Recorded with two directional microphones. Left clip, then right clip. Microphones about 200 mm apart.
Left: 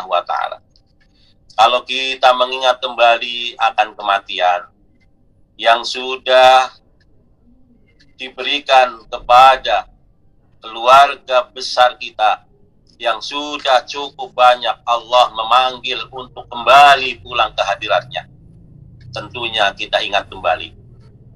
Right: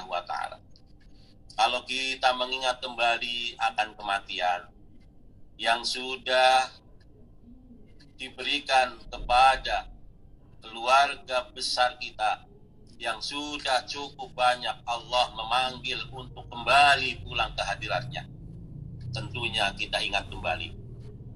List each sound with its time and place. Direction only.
0.0 s a sound: 50° left (ahead or behind)
1.5 s speech: 50° left (ahead or behind)
8.2 s speech: 50° left (ahead or behind)